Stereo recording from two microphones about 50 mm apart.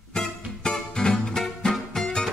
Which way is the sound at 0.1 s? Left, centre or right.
Centre.